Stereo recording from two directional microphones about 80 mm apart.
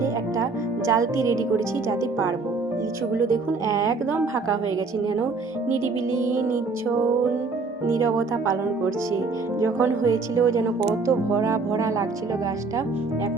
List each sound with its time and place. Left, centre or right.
0.9 s a woman's voice: right
9.6 s a woman's voice: right